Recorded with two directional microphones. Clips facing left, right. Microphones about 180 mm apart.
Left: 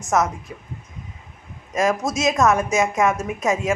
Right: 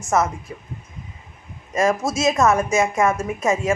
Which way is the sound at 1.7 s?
Centre (ahead or behind).